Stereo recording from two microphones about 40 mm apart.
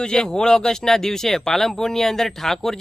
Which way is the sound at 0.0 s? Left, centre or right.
Centre.